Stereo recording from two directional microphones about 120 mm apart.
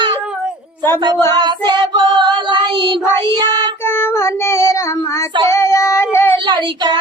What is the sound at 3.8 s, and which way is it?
Child singing, 20° left (ahead or behind).